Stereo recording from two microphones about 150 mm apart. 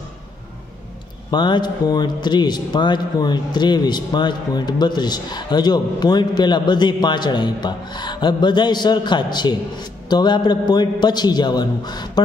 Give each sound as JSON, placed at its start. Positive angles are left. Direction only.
{"t": 1.3, "sound": "a man's voice", "side_deg": 30}